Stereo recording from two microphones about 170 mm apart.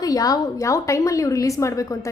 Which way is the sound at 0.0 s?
20° left (ahead or behind).